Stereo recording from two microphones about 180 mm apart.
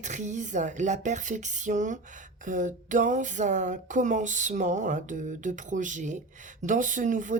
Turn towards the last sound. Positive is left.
turn(degrees=-45)  # may be behind; listen again after turning